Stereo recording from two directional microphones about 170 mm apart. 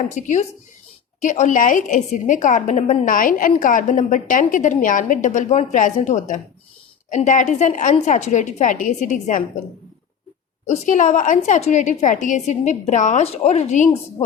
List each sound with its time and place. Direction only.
0.1 s a woman's voice: 45° left (ahead or behind)
10.7 s a woman's voice: 45° left (ahead or behind)